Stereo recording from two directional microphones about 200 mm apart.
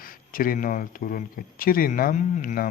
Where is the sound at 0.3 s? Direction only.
45° left (ahead or behind).